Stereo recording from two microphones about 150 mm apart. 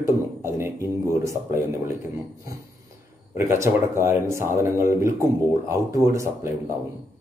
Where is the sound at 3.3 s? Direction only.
20° right (ahead or behind).